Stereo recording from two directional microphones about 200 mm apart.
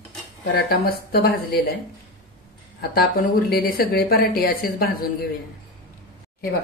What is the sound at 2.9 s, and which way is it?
Speech, 50° left (ahead or behind).